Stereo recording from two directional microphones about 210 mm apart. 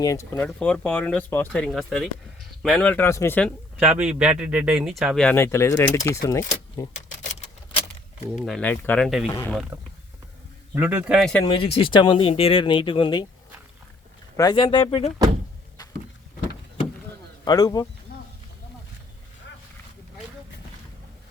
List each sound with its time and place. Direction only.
0.0 s a man's voice: 15° left (ahead or behind)
7.2 s typewriter: 35° left (ahead or behind)
8.4 s a man's voice: centre (ahead or behind)
10.8 s a man's voice: 10° right (ahead or behind)
11.4 s speech: 25° left (ahead or behind)
14.3 s speech: 20° left (ahead or behind)
17.4 s speech: 20° left (ahead or behind)